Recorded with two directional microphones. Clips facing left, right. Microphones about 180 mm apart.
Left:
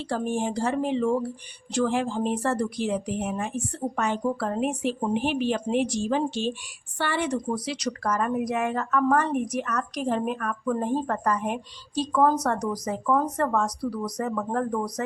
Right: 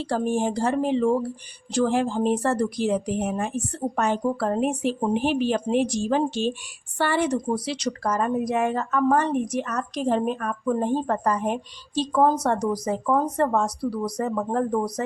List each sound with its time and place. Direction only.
0.0 s a woman's voice: 40° right (ahead or behind)